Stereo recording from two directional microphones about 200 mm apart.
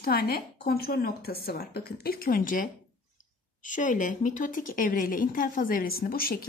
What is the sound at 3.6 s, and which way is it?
A woman's voice, 40° left (ahead or behind).